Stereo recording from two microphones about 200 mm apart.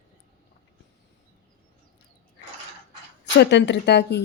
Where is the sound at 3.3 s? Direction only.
60° left (ahead or behind).